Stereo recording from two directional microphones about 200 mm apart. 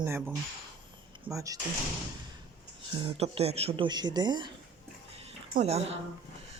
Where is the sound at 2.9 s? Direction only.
30° right (ahead or behind).